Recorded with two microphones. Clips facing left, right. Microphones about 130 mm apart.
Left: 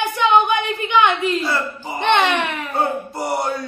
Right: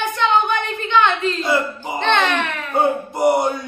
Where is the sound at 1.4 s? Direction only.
20° right (ahead or behind).